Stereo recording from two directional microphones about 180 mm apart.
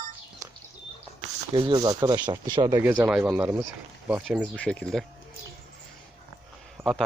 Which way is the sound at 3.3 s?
10° right (ahead or behind).